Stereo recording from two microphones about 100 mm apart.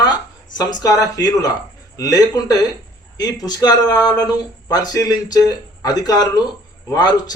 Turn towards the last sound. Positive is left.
turn(degrees=40)  # may be behind; listen again after turning